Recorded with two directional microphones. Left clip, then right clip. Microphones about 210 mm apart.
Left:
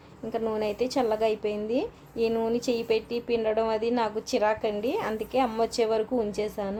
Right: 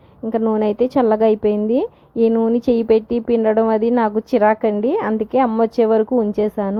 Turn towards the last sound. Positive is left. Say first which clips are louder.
# right 10 dB
turn(degrees=-30)  # may be behind; listen again after turning